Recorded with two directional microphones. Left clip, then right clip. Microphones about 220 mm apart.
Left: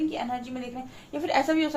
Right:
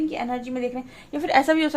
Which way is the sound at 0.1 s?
45° right (ahead or behind).